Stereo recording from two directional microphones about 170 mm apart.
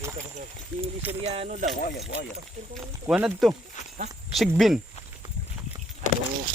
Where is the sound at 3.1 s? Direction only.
5° right (ahead or behind).